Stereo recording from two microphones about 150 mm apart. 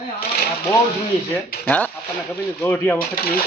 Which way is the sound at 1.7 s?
10° left (ahead or behind).